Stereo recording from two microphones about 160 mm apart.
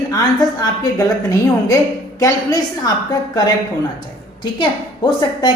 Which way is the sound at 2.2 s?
25° left (ahead or behind).